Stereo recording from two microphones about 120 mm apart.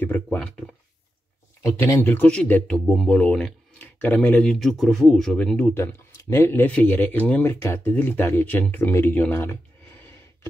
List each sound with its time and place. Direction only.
0.0 s speech: 15° left (ahead or behind)
1.8 s speech: 20° left (ahead or behind)
4.5 s speech: centre (ahead or behind)
5.8 s speech: 20° left (ahead or behind)
9.2 s a sound: 15° left (ahead or behind)